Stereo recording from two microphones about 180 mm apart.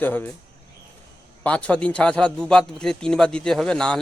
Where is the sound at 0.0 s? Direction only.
10° left (ahead or behind).